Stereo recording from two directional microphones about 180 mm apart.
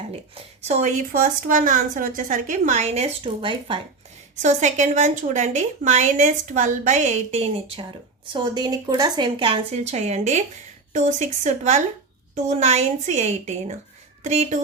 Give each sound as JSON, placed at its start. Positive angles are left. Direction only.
{"t": 0.7, "sound": "a woman's voice", "side_deg": -40}
{"t": 8.3, "sound": "a woman's voice", "side_deg": -25}